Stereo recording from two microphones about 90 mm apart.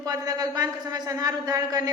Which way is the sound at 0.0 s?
45° right (ahead or behind).